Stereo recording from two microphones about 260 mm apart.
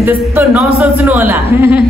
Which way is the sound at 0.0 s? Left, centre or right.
Centre.